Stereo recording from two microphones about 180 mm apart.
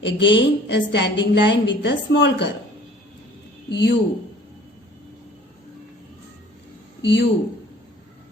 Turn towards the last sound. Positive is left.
turn(degrees=75)  # may be behind; listen again after turning